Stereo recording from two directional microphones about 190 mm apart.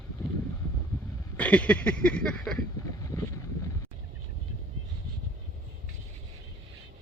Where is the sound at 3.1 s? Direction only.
15° left (ahead or behind).